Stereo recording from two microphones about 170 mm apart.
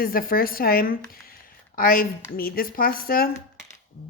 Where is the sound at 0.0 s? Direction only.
60° left (ahead or behind).